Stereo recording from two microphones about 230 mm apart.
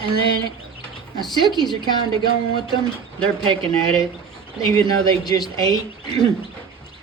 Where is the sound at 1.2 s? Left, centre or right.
Centre.